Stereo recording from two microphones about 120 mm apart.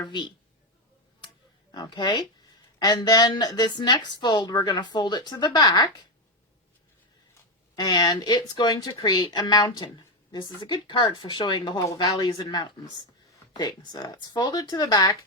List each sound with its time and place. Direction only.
0.0 s a woman's voice: 40° left (ahead or behind)
1.7 s a woman's voice: 35° left (ahead or behind)
7.8 s a woman's voice: 35° left (ahead or behind)